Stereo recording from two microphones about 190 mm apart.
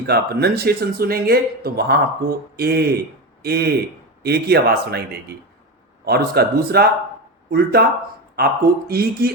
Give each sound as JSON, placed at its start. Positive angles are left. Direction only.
{"t": 0.0, "sound": "speech", "side_deg": -55}